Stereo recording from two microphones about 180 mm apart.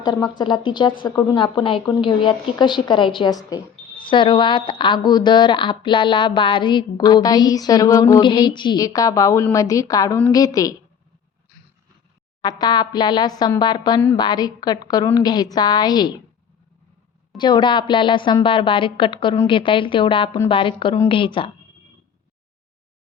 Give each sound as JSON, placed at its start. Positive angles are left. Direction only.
{"t": 0.0, "sound": "speech", "side_deg": 25}
{"t": 12.4, "sound": "speech", "side_deg": 20}
{"t": 17.3, "sound": "speech", "side_deg": 25}